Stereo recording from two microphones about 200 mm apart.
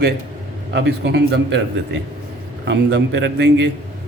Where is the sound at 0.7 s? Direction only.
60° right (ahead or behind).